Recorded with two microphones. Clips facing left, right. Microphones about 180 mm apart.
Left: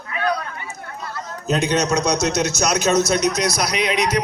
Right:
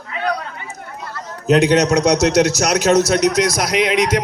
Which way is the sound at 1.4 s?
90° right.